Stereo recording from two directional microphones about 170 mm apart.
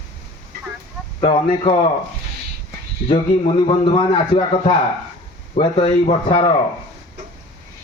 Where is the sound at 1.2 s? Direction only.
35° left (ahead or behind).